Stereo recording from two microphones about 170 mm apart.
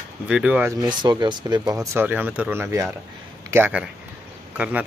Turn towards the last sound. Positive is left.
turn(degrees=-10)  # may be behind; listen again after turning